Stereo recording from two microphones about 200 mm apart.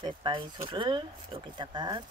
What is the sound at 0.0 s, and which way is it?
Speech, 25° right (ahead or behind).